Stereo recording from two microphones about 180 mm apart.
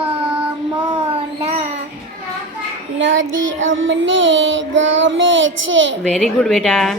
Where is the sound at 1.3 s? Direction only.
35° right (ahead or behind).